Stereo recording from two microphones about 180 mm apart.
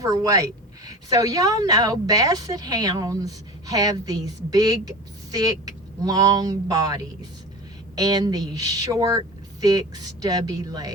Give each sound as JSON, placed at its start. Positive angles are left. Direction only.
{"t": 0.0, "sound": "a woman's voice", "side_deg": -20}